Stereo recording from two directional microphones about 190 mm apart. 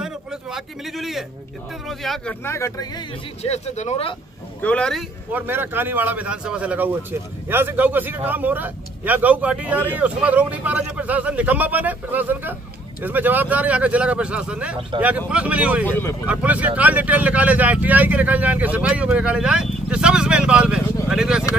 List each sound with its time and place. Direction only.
0.0 s a sound: 5° right (ahead or behind)
1.9 s speech: centre (ahead or behind)
2.4 s speech: 15° left (ahead or behind)
3.4 s speech: 35° left (ahead or behind)
4.6 s speech: 5° left (ahead or behind)
5.3 s speech: 10° right (ahead or behind)
15.8 s speech: 10° left (ahead or behind)
16.3 s speech: 10° right (ahead or behind)